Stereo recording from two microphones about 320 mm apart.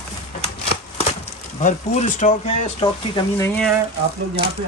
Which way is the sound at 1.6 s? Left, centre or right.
Left.